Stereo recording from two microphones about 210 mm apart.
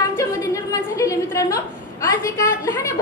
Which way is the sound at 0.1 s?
15° left (ahead or behind).